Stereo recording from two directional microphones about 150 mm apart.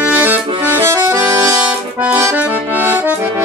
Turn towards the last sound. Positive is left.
turn(degrees=-15)  # may be behind; listen again after turning